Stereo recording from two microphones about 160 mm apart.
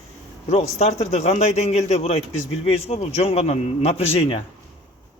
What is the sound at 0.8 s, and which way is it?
Speech, 45° left (ahead or behind).